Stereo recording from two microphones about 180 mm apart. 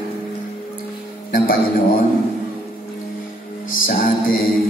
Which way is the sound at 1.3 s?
50° left (ahead or behind).